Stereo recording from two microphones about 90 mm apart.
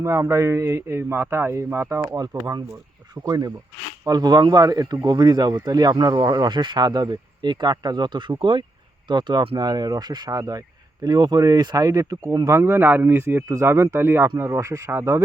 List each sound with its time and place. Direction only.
0.0 s speech: 35° right (ahead or behind)
2.0 s speech: 40° right (ahead or behind); by 9.6 s 70° right (ahead or behind)
9.6 s speech: 45° right (ahead or behind)
12.5 s speech: 25° right (ahead or behind)